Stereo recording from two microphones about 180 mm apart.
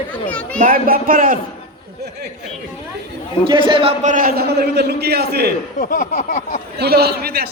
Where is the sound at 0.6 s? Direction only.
50° right (ahead or behind).